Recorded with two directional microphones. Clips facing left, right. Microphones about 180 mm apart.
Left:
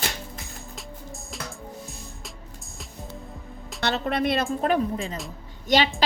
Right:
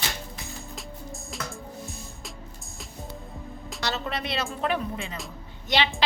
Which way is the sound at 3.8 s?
60° left (ahead or behind).